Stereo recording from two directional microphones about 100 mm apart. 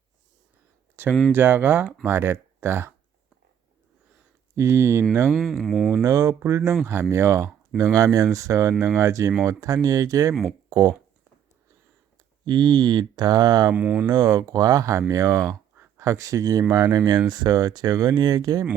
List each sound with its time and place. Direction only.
1.0 s speech: 20° right (ahead or behind)
4.5 s speech: 30° right (ahead or behind)
5.3 s speech: centre (ahead or behind)
6.0 s speech: 30° right (ahead or behind)
12.5 s speech: 45° right (ahead or behind)
13.7 s speech: 15° right (ahead or behind)
14.1 s speech: 40° right (ahead or behind)